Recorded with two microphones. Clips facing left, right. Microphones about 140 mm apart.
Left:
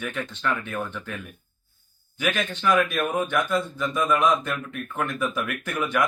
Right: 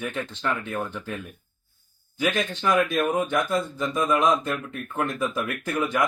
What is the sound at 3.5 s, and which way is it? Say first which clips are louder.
Speech: even; 35° right (ahead or behind).